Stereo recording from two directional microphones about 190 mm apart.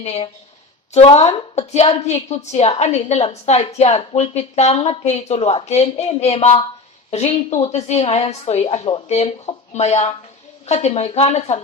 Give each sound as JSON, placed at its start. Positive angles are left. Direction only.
{"t": 0.0, "sound": "a woman's voice", "side_deg": 35}